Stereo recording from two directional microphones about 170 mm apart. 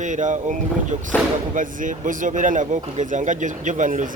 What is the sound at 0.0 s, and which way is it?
Speech, 45° right (ahead or behind).